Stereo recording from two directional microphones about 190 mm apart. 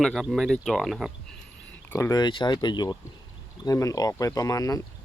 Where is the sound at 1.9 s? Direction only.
15° left (ahead or behind).